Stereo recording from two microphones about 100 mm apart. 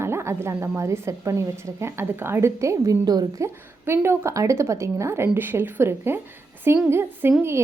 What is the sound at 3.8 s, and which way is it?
A woman's voice, 25° right (ahead or behind).